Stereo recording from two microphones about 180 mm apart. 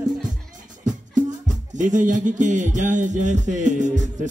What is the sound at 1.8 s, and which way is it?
Music, 45° right (ahead or behind).